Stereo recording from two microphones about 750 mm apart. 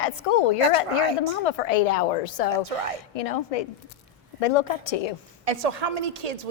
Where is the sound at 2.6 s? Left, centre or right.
Right.